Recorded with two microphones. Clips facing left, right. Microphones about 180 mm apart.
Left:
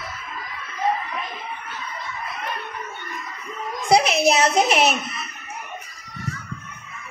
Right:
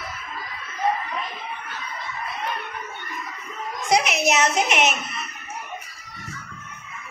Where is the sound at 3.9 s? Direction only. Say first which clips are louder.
Left 4 dB; 30° left (ahead or behind).